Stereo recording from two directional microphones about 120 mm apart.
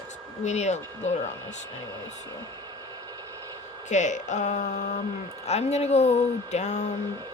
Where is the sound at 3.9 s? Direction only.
85° left.